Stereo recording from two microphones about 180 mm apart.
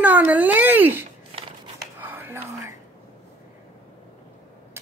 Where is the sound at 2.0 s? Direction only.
10° right (ahead or behind).